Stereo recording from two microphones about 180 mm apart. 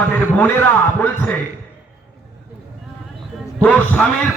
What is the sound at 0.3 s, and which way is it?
A man's voice, 10° left (ahead or behind).